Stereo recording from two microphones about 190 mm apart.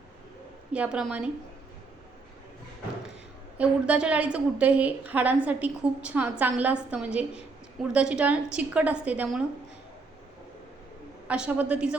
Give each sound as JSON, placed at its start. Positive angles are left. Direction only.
{"t": 0.7, "sound": "a woman's voice", "side_deg": -5}
{"t": 3.6, "sound": "a woman's voice", "side_deg": -5}
{"t": 11.3, "sound": "a woman's voice", "side_deg": -5}